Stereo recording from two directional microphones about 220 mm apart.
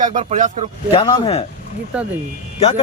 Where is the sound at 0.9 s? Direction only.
25° left (ahead or behind).